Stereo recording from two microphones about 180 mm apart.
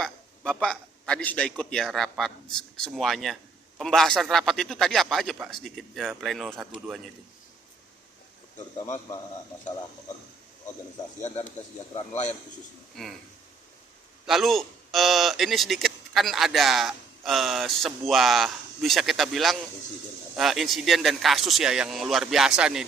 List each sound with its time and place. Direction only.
0.0 s a man's voice: 5° left (ahead or behind)
11.2 s speech: 40° left (ahead or behind)
13.0 s speech: centre (ahead or behind)
14.3 s speech: centre (ahead or behind)